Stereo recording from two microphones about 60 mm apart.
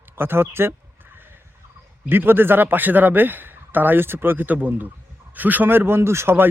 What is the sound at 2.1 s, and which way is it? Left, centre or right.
Speech, right.